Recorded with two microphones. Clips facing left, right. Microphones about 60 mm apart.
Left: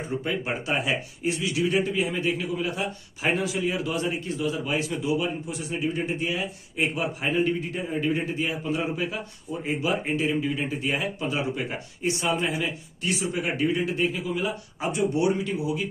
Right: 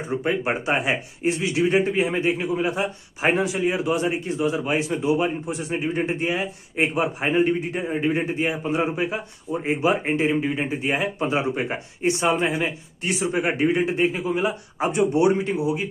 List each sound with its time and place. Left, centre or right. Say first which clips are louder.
0.1 s speech: right 6 dB; right